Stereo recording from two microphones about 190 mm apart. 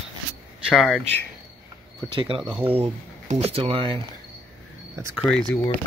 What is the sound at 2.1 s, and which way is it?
Speech, 25° right (ahead or behind).